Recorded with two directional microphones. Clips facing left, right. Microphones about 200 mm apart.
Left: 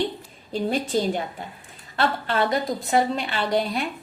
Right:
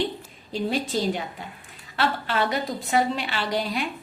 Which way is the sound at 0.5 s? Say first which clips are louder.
Left 2 dB; 50° left (ahead or behind).